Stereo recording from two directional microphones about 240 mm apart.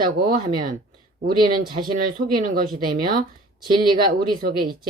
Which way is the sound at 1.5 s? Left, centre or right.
Centre.